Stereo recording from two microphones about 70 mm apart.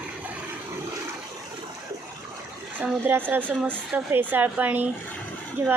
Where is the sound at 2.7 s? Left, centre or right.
Right.